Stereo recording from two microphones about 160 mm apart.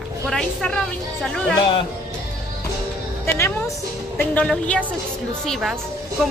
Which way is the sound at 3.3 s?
15° left (ahead or behind).